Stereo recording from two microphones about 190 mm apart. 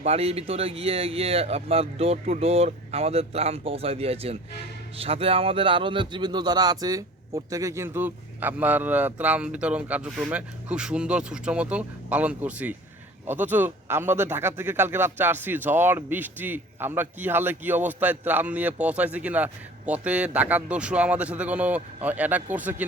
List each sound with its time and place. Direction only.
0.0 s speech: 30° right (ahead or behind); by 22.8 s 10° right (ahead or behind)